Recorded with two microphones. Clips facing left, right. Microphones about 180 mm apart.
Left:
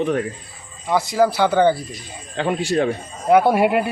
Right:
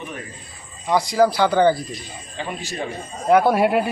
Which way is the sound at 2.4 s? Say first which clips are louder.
Left 8 dB; 75° left (ahead or behind).